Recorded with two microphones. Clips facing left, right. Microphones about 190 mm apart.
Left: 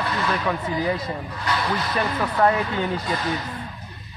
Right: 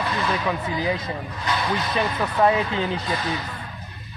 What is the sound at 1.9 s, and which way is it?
Speech, 15° right (ahead or behind).